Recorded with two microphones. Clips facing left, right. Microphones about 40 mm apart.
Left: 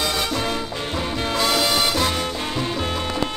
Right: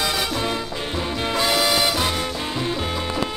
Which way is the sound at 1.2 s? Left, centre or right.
Right.